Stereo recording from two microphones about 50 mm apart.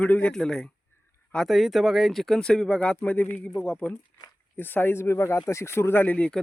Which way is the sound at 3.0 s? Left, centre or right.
Left.